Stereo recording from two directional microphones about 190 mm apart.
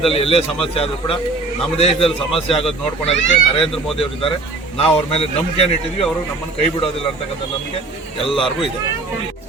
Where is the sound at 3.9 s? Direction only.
30° left (ahead or behind).